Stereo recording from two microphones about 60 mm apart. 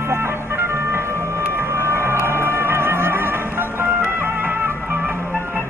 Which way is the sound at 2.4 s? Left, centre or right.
Right.